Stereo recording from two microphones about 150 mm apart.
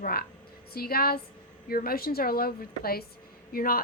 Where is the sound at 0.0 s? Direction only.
90° left.